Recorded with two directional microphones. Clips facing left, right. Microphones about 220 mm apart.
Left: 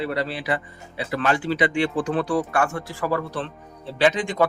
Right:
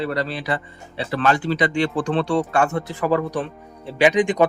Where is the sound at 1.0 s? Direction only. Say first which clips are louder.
Right 3 dB; 35° right (ahead or behind).